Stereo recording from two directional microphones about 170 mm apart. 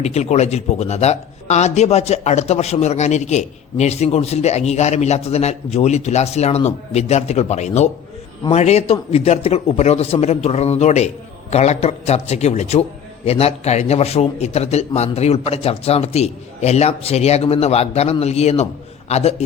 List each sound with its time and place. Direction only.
0.0 s speech: 40° left (ahead or behind)